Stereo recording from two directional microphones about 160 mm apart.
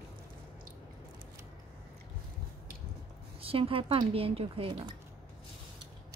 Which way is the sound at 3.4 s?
35° right (ahead or behind).